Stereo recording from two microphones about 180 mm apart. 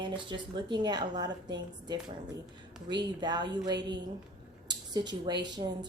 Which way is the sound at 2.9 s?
25° right (ahead or behind).